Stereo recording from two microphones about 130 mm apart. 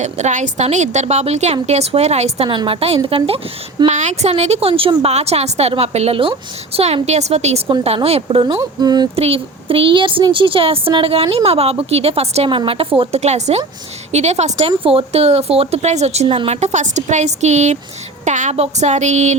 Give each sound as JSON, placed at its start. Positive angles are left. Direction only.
{"t": 0.0, "sound": "a woman's voice", "side_deg": -65}
{"t": 2.5, "sound": "speech", "side_deg": -45}
{"t": 3.8, "sound": "a woman's voice", "side_deg": -60}
{"t": 4.7, "sound": "speech", "side_deg": -35}
{"t": 5.0, "sound": "a woman's voice", "side_deg": -55}
{"t": 8.8, "sound": "speech", "side_deg": -30}
{"t": 9.1, "sound": "speech", "side_deg": -50}
{"t": 12.5, "sound": "a woman's voice", "side_deg": -45}